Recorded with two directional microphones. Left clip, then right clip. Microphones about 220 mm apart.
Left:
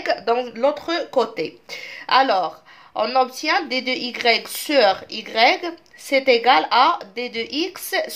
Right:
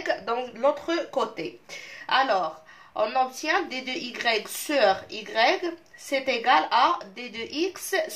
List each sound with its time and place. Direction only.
0.0 s speech: 50° left (ahead or behind)